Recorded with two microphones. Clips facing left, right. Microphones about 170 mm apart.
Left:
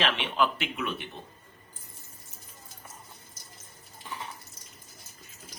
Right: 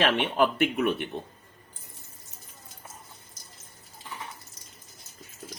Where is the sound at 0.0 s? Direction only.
50° right (ahead or behind).